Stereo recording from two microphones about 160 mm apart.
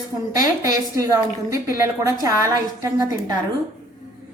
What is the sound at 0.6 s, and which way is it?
A woman's voice, 20° right (ahead or behind).